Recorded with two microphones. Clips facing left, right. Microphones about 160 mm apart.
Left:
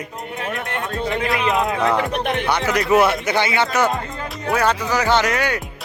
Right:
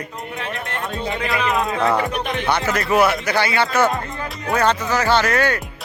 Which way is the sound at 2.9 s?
25° left (ahead or behind).